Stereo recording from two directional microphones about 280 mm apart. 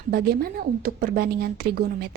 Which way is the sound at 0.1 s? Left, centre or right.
Right.